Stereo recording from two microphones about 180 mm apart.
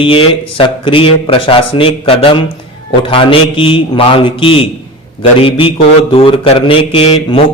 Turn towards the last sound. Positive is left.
turn(degrees=30)  # may be behind; listen again after turning